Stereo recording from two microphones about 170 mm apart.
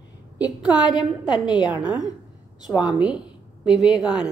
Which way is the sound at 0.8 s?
25° left (ahead or behind).